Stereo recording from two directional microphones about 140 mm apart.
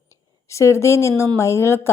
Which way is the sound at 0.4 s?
20° left (ahead or behind).